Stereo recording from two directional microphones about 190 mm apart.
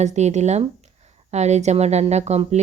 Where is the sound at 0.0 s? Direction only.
35° right (ahead or behind).